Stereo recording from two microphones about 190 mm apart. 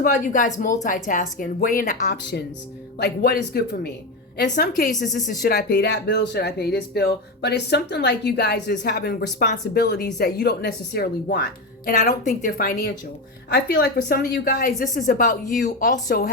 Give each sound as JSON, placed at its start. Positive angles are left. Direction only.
{"t": 0.0, "sound": "speech", "side_deg": 45}
{"t": 2.0, "sound": "speech", "side_deg": 60}
{"t": 5.8, "sound": "speech", "side_deg": 65}
{"t": 11.9, "sound": "speech", "side_deg": 45}
{"t": 13.5, "sound": "speech", "side_deg": 65}